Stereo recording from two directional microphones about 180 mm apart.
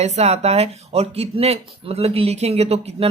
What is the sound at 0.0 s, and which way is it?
Speech, 35° right (ahead or behind).